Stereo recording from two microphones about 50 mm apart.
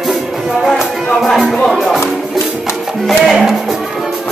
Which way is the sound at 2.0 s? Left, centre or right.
Left.